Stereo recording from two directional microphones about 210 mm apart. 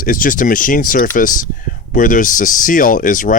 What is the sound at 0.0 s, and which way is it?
Speech, 40° left (ahead or behind).